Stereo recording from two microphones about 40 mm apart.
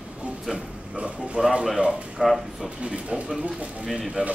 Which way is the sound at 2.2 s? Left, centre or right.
Centre.